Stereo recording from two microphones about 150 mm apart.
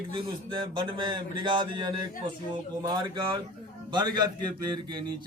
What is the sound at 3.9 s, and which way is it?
A man's voice, 30° right (ahead or behind).